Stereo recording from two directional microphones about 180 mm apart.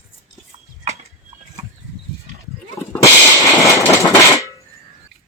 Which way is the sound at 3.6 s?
15° left (ahead or behind).